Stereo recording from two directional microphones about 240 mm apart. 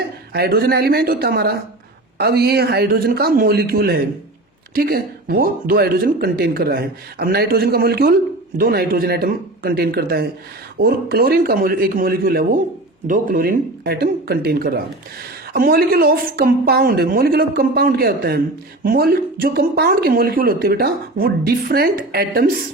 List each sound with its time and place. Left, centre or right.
0.3 s a woman's voice: right